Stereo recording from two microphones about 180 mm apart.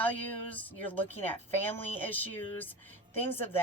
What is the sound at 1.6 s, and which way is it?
Speech, 10° left (ahead or behind).